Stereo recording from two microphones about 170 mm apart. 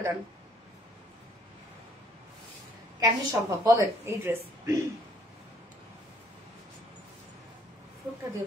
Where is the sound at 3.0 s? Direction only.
20° right (ahead or behind).